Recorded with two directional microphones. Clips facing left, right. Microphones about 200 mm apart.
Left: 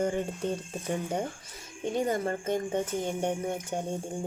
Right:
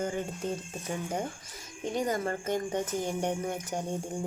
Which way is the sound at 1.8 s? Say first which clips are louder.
Left 2 dB; 25° left (ahead or behind).